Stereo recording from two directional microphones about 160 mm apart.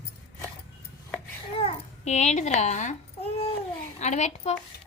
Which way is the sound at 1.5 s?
40° left (ahead or behind).